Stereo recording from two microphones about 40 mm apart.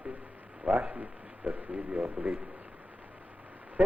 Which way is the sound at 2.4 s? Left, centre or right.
Right.